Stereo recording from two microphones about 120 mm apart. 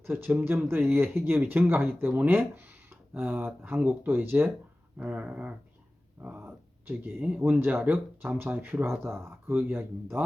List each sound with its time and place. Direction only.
0.0 s speech: 20° right (ahead or behind)